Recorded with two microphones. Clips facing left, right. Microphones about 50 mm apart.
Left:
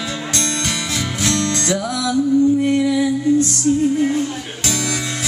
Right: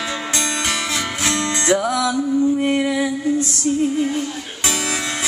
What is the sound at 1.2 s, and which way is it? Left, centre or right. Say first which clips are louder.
Music: left 1 dB; centre.